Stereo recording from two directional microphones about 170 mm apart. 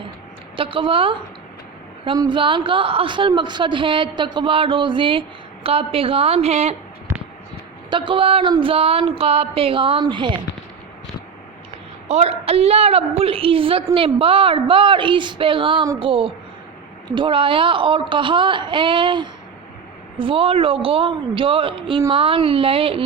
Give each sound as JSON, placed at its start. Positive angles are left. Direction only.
{"t": 0.5, "sound": "a woman's voice", "side_deg": -30}
{"t": 2.3, "sound": "a woman's voice", "side_deg": -30}
{"t": 7.9, "sound": "a woman's voice", "side_deg": -30}
{"t": 12.0, "sound": "a woman's voice", "side_deg": -40}